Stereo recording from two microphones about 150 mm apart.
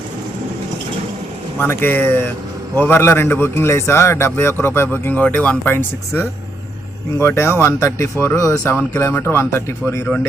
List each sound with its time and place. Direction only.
1.5 s a man's voice: 15° left (ahead or behind)